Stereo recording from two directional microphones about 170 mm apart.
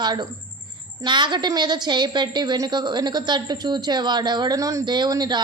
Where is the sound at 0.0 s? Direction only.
25° right (ahead or behind).